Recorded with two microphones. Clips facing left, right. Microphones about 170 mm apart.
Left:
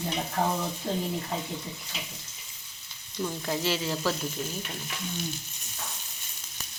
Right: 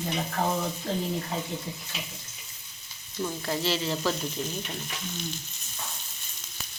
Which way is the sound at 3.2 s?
Centre (ahead or behind).